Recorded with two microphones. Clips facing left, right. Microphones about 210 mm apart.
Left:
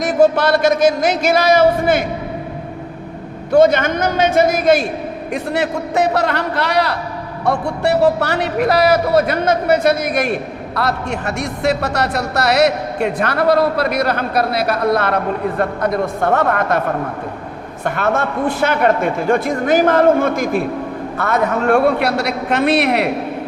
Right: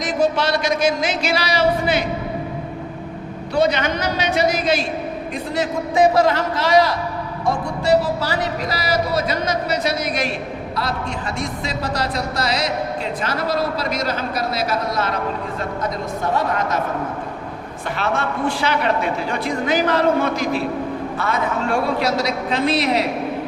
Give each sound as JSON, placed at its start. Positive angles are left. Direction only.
{"t": 0.4, "sound": "a man's voice", "side_deg": 50}
{"t": 3.5, "sound": "a man's voice", "side_deg": 50}
{"t": 5.3, "sound": "a woman's voice", "side_deg": 70}
{"t": 10.8, "sound": "a woman's voice", "side_deg": 65}
{"t": 17.8, "sound": "a man's voice", "side_deg": 50}